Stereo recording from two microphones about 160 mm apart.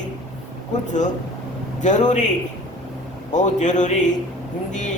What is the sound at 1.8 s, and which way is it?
Speech, 50° left (ahead or behind).